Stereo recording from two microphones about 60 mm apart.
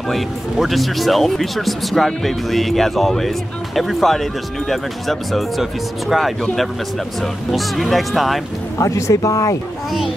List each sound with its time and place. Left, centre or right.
0.1 s speech: centre
8.7 s speech: left